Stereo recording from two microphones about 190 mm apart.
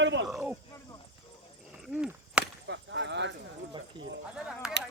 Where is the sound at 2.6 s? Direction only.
70° right (ahead or behind).